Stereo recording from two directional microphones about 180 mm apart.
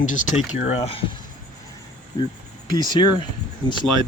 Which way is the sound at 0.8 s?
30° left (ahead or behind).